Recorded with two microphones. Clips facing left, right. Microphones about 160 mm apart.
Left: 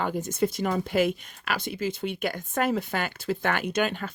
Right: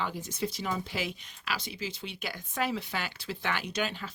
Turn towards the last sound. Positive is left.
turn(degrees=50)  # may be behind; listen again after turning